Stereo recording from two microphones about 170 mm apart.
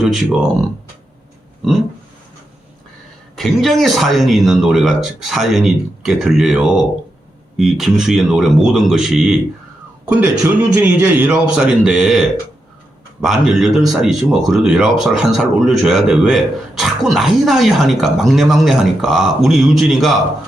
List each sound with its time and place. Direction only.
0.0 s speech: 5° right (ahead or behind)
3.3 s speech: centre (ahead or behind)
10.2 s a man's voice: 15° right (ahead or behind)
11.3 s speech: 5° right (ahead or behind)
13.2 s speech: centre (ahead or behind)